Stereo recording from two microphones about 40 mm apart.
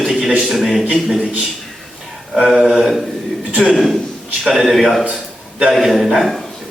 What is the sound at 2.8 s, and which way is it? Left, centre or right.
A man's voice, centre.